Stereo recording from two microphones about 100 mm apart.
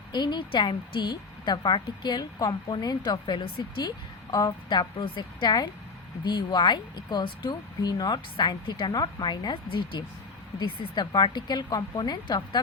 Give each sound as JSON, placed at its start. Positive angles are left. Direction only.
{"t": 0.1, "sound": "a woman's voice", "side_deg": 50}